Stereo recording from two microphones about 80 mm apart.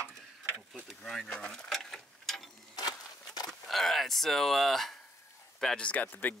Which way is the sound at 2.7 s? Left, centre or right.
Left.